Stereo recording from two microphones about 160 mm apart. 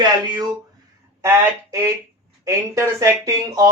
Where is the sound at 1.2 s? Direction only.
15° right (ahead or behind).